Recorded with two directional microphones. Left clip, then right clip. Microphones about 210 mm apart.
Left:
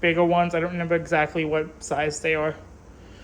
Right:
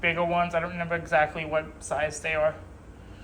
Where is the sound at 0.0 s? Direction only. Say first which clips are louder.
Left 5 dB; 25° left (ahead or behind).